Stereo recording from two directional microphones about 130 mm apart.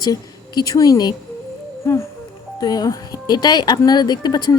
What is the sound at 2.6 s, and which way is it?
Speech, 30° left (ahead or behind).